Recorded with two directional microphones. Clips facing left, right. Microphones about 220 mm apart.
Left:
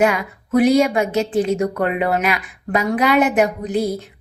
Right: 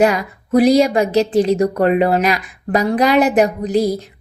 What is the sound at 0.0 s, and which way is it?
A woman's voice, 35° right (ahead or behind).